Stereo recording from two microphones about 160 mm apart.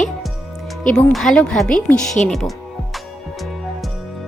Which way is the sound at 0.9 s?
5° left (ahead or behind).